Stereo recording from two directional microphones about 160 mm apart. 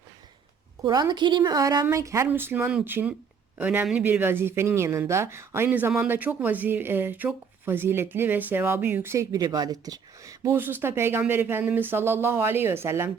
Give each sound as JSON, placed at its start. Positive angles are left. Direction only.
{"t": 0.8, "sound": "a woman's voice", "side_deg": -25}